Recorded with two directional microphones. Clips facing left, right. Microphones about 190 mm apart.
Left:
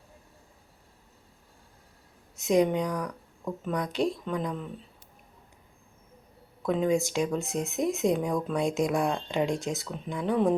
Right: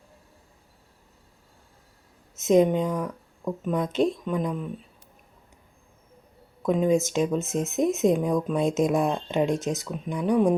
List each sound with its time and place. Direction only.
2.4 s speech: 20° right (ahead or behind)
6.7 s speech: 15° right (ahead or behind)